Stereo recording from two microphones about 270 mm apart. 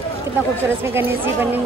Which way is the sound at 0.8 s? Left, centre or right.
Centre.